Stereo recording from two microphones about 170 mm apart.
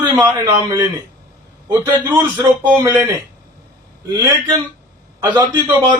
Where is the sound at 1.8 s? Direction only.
10° right (ahead or behind).